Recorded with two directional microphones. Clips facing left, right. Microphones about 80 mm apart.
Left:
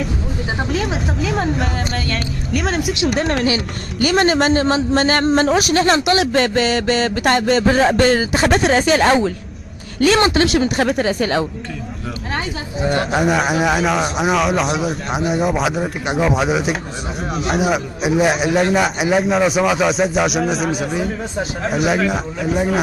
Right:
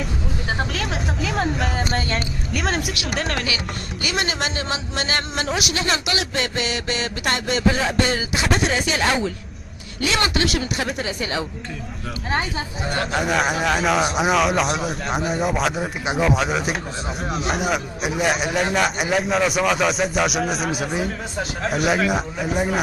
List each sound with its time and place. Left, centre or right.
0.6 s a man's voice: centre
3.4 s a man's voice: left
12.9 s speech: centre
13.2 s a man's voice: centre